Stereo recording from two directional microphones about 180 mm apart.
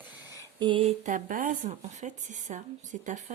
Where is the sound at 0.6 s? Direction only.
30° right (ahead or behind).